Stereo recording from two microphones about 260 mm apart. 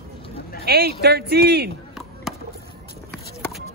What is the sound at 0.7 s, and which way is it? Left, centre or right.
A man's voice, right.